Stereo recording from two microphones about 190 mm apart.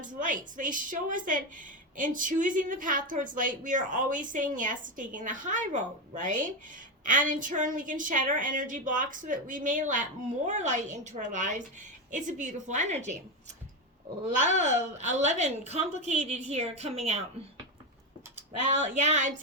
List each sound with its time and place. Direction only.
0.0 s a woman's voice: 45° right (ahead or behind)
14.3 s a woman's voice: 40° right (ahead or behind)
18.7 s a woman's voice: 35° right (ahead or behind)